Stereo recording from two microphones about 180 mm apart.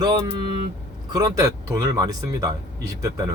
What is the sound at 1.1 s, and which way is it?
Speech, 20° right (ahead or behind).